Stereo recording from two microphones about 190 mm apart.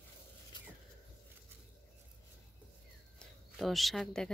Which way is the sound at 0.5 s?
25° left (ahead or behind).